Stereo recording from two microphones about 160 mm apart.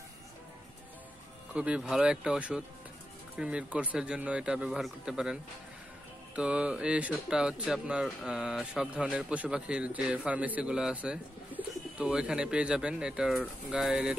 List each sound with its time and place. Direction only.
1.5 s speech: 5° right (ahead or behind)